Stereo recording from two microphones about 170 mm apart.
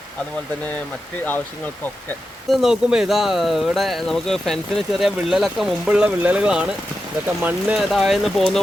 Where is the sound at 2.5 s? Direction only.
Centre (ahead or behind).